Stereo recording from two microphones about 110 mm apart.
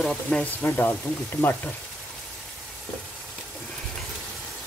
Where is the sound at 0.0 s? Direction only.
5° left (ahead or behind).